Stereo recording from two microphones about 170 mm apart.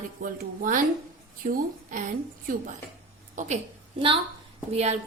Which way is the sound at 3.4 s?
45° right (ahead or behind).